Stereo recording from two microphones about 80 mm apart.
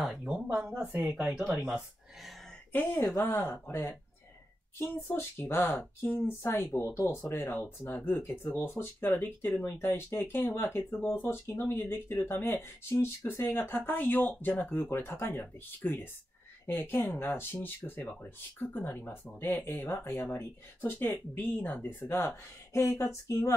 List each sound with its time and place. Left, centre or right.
0.0 s a sound: centre
0.6 s speech: centre
0.8 s speech: right
2.7 s speech: left
4.7 s speech: left
12.9 s speech: left
13.3 s speech: left
22.1 s speech: left